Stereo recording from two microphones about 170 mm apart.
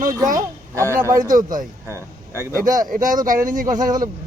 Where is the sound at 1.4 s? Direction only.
50° right (ahead or behind).